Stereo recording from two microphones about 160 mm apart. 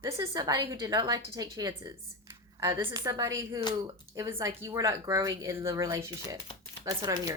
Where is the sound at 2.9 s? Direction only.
20° right (ahead or behind).